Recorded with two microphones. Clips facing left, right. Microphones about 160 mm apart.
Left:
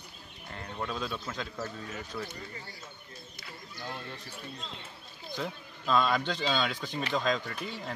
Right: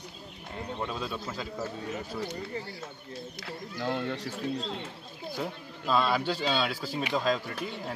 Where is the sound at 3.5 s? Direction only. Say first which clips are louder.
Right 9 dB; 70° right (ahead or behind).